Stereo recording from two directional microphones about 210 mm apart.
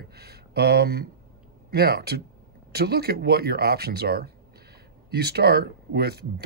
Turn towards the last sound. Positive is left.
turn(degrees=-50)  # may be behind; listen again after turning